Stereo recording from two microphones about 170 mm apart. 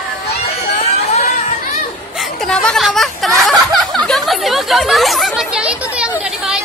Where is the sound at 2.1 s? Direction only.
Centre (ahead or behind).